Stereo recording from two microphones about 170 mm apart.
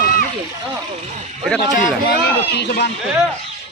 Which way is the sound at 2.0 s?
70° left (ahead or behind).